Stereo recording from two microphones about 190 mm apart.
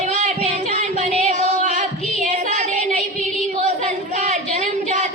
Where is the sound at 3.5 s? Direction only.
40° right (ahead or behind).